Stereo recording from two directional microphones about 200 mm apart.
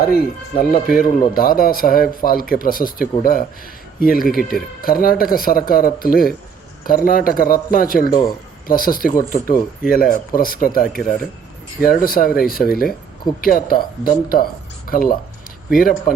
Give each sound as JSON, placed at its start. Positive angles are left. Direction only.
{"t": 0.0, "sound": "speech", "side_deg": 50}